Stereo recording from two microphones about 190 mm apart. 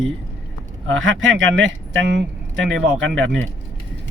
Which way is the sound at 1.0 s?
90° right.